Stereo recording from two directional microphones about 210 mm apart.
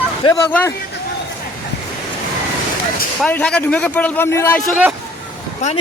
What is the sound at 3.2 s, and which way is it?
Speech, 5° left (ahead or behind).